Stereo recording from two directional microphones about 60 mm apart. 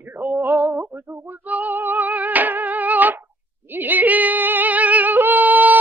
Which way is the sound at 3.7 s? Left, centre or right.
Right.